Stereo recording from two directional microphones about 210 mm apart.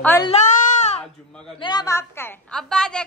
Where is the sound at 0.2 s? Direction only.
30° left (ahead or behind).